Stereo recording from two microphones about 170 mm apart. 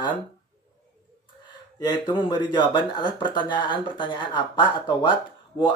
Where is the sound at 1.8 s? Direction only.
25° left (ahead or behind).